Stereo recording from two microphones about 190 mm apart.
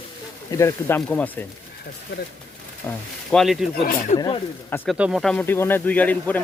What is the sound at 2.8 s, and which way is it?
Speech, 5° left (ahead or behind).